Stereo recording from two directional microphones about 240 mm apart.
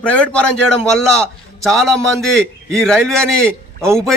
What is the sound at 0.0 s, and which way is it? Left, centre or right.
A man's voice, centre.